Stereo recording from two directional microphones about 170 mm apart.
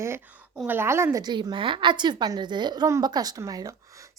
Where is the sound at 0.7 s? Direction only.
15° right (ahead or behind).